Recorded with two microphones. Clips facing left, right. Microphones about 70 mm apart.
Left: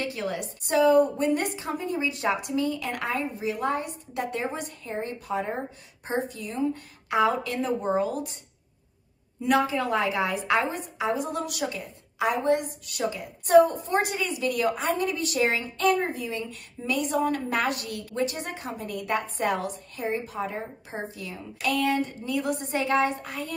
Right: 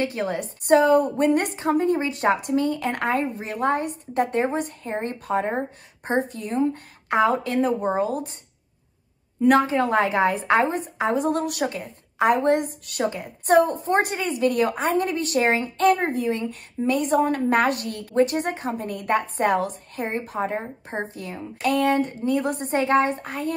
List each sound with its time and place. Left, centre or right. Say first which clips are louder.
0.0 s a woman's voice: right 5 dB; right
9.4 s a woman's voice: right 6 dB; right